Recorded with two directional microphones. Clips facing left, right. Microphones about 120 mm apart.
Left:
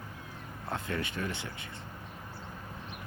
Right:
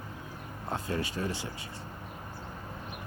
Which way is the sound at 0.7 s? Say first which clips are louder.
Right 2 dB; 35° right (ahead or behind).